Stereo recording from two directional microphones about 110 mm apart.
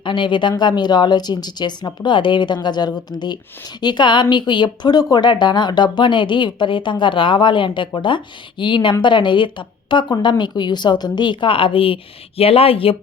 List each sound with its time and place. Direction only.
0.0 s a woman's voice: 50° left (ahead or behind)